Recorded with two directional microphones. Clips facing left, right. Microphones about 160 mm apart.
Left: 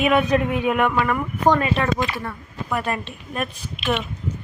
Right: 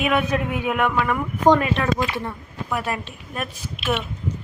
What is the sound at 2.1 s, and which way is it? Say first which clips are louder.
Speech: right 2 dB; 20° right (ahead or behind).